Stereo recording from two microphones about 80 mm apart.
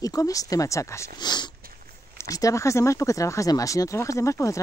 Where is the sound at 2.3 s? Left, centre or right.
Left.